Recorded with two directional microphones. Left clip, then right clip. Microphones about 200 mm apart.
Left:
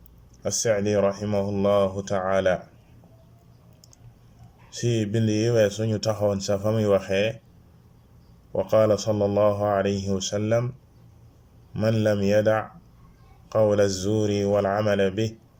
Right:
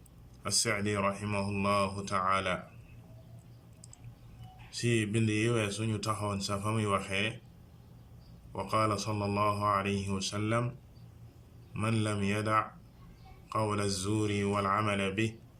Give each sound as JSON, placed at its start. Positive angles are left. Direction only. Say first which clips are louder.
{"t": 0.4, "sound": "speech", "louder": "left 8 dB", "side_deg": 40}
{"t": 4.7, "sound": "speech", "louder": "left 5 dB", "side_deg": 40}
{"t": 8.5, "sound": "speech", "louder": "left 11 dB", "side_deg": 40}
{"t": 11.7, "sound": "speech", "louder": "left 11 dB", "side_deg": 40}